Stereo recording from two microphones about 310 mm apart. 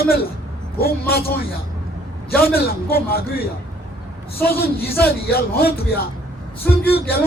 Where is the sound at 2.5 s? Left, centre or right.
Left.